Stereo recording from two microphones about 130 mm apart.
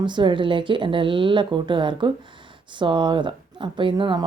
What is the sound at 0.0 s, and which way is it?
Speech, 35° right (ahead or behind).